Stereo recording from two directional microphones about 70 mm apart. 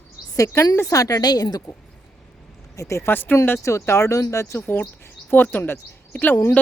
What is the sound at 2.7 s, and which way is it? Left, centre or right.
Speech, left.